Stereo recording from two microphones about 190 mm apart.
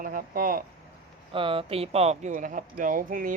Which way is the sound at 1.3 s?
30° right (ahead or behind).